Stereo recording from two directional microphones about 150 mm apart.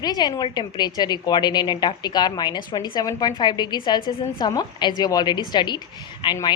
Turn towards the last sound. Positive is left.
turn(degrees=30)  # may be behind; listen again after turning